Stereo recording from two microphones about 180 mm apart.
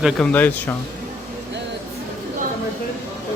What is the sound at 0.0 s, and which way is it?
Speech, 5° left (ahead or behind).